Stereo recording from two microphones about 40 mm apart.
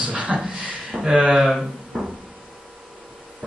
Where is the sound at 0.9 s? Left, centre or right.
Centre.